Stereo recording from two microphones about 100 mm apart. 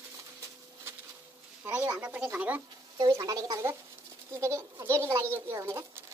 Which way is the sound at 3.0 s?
40° right (ahead or behind).